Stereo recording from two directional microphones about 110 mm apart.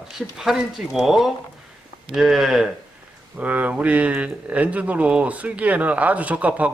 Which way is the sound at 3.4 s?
15° right (ahead or behind).